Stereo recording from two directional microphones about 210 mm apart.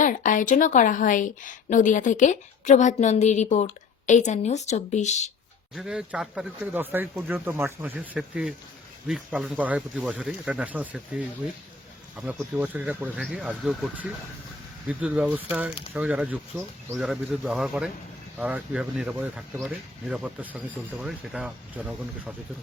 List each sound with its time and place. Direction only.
0.0 s speech: 40° left (ahead or behind)
5.7 s speech: centre (ahead or behind)